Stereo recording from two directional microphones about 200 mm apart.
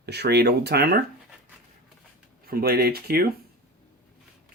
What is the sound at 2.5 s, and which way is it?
Speech, 50° right (ahead or behind).